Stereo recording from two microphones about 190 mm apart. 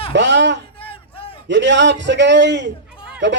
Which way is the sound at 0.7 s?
30° left (ahead or behind).